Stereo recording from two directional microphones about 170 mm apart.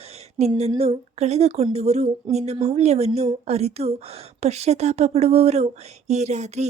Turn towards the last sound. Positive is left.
turn(degrees=-40)  # may be behind; listen again after turning